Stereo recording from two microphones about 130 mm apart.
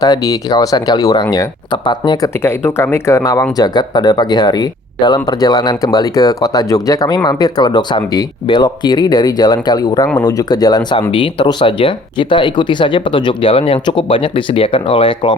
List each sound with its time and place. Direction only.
0.0 s speech: 30° left (ahead or behind)
2.4 s speech: 20° left (ahead or behind)
11.1 s speech: 40° left (ahead or behind)